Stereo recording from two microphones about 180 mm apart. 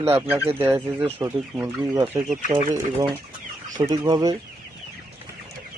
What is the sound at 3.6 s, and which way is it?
Chicken, 45° right (ahead or behind).